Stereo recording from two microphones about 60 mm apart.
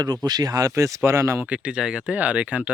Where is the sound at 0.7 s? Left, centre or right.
Right.